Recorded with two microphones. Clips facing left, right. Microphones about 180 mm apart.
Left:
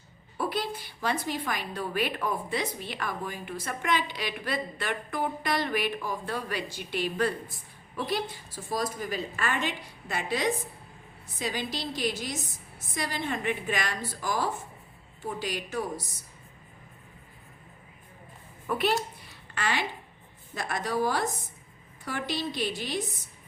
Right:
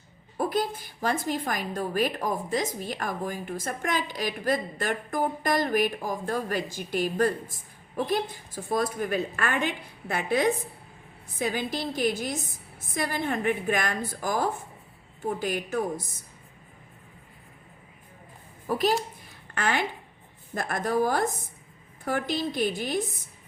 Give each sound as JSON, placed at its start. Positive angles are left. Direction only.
{"t": 0.3, "sound": "a woman's voice", "side_deg": -45}
{"t": 18.7, "sound": "a woman's voice", "side_deg": -40}
{"t": 19.3, "sound": "a sound", "side_deg": -50}
{"t": 20.5, "sound": "a woman's voice", "side_deg": -50}